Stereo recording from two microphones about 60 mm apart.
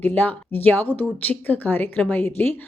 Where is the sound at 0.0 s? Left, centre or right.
Left.